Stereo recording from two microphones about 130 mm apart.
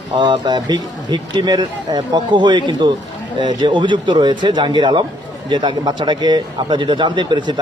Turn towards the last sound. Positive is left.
turn(degrees=-35)  # may be behind; listen again after turning